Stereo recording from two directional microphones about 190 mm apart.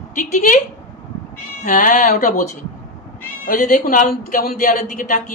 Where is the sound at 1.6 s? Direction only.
45° left (ahead or behind).